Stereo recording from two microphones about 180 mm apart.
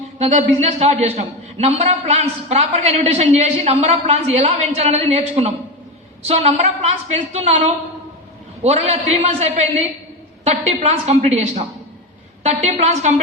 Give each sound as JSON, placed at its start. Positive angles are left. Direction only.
{"t": 0.2, "sound": "a man's voice", "side_deg": -40}
{"t": 8.6, "sound": "a man's voice", "side_deg": -35}